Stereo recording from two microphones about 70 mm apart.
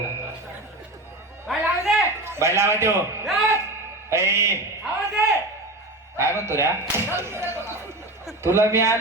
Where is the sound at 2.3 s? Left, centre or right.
Right.